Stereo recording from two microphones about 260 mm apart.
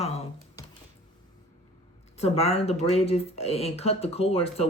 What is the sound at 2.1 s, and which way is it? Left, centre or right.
Speech, left.